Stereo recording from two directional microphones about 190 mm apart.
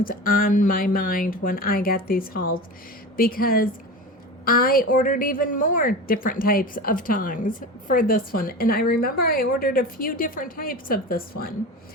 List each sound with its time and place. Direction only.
0.0 s a woman's voice: 50° left (ahead or behind)